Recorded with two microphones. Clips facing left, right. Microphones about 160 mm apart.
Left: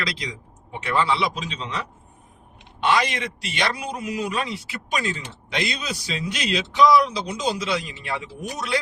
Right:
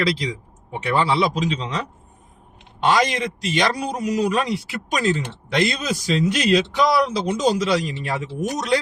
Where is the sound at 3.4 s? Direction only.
40° right (ahead or behind).